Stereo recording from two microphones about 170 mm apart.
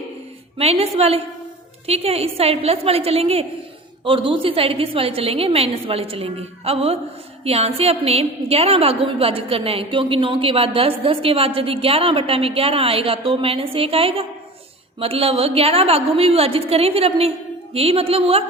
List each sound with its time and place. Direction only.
0.6 s a woman's voice: 35° right (ahead or behind)